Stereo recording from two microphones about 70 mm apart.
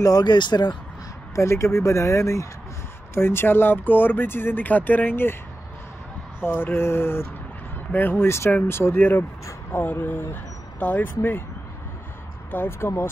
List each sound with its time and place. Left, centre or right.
0.0 s speech: left
1.3 s speech: left
6.4 s speech: left
8.9 s speech: left
12.4 s speech: left